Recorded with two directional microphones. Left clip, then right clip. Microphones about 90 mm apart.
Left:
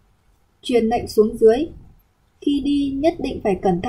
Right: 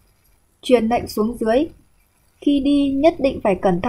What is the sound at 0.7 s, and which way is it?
Speech, 15° right (ahead or behind).